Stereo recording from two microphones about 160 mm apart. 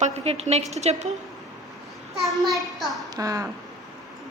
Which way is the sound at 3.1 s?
20° right (ahead or behind).